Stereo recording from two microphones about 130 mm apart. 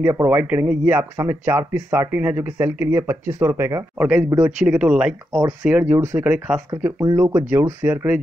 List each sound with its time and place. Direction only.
0.0 s speech: 20° right (ahead or behind)